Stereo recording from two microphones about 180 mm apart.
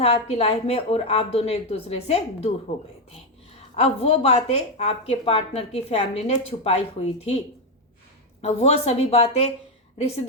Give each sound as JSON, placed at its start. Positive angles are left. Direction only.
{"t": 0.0, "sound": "speech", "side_deg": 30}
{"t": 3.8, "sound": "speech", "side_deg": 35}
{"t": 8.4, "sound": "speech", "side_deg": 35}